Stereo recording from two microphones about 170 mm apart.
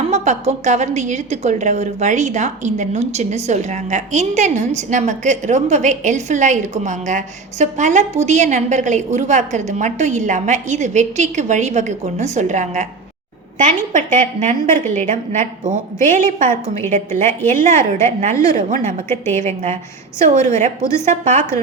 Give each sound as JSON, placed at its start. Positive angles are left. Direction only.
{"t": 0.1, "sound": "a woman's voice", "side_deg": -40}
{"t": 19.0, "sound": "a woman's voice", "side_deg": 15}
{"t": 19.5, "sound": "a woman's voice", "side_deg": -40}